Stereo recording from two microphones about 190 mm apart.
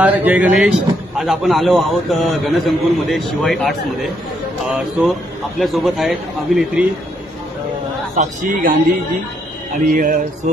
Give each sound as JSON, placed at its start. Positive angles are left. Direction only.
{"t": 0.0, "sound": "a man's voice", "side_deg": -10}
{"t": 8.2, "sound": "speech", "side_deg": -45}
{"t": 9.8, "sound": "speech", "side_deg": -45}